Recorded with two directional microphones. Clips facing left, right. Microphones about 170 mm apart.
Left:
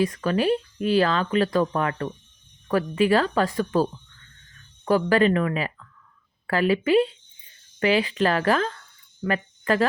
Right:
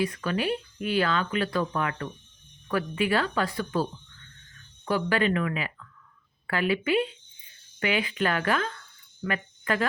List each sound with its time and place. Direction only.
0.0 s speech: 40° left (ahead or behind)
4.9 s speech: 40° left (ahead or behind)